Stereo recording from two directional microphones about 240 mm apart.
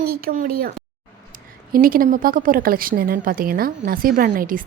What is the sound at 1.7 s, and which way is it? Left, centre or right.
A woman's voice, right.